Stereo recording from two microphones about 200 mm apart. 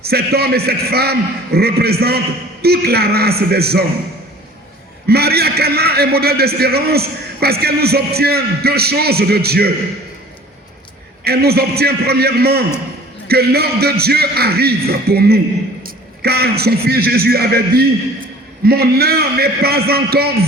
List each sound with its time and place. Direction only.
0.0 s a man's voice: 50° right (ahead or behind)
5.0 s a man's voice: 50° right (ahead or behind)
11.2 s a man's voice: 50° right (ahead or behind)